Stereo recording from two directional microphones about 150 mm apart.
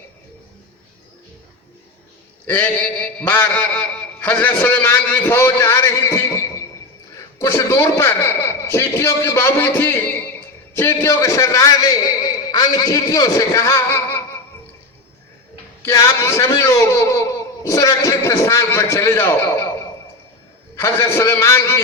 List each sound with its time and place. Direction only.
2.5 s a man's voice: 10° left (ahead or behind)
15.8 s a man's voice: 20° left (ahead or behind)
20.8 s a man's voice: 15° left (ahead or behind)